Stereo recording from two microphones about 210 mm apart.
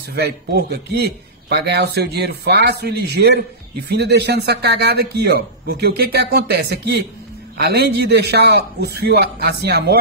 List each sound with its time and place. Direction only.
0.1 s a man's voice: 50° right (ahead or behind)